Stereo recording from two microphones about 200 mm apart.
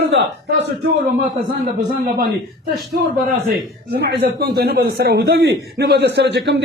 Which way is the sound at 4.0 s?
55° right (ahead or behind).